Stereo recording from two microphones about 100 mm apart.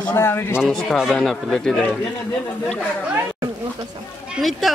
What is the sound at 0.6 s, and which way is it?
A man's voice, centre (ahead or behind).